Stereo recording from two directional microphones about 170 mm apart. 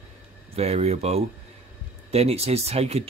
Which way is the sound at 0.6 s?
40° right (ahead or behind).